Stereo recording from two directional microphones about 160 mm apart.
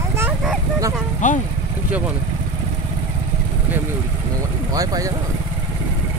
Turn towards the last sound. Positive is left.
turn(degrees=-20)  # may be behind; listen again after turning